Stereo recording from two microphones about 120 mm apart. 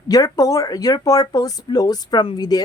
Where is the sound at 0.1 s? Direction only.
30° left (ahead or behind).